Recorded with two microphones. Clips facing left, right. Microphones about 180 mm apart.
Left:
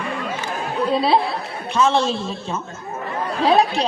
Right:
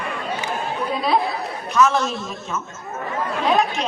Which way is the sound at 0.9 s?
30° left (ahead or behind).